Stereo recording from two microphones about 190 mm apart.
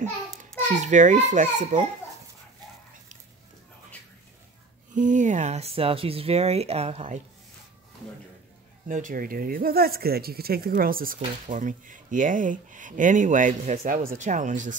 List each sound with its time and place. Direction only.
0.6 s speech: 40° right (ahead or behind)
4.9 s speech: 40° right (ahead or behind)
8.8 s speech: 45° right (ahead or behind)